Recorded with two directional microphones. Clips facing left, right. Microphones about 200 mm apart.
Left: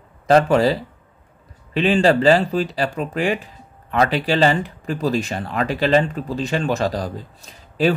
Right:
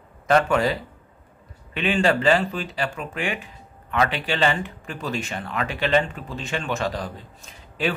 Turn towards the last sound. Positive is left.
turn(degrees=35)  # may be behind; listen again after turning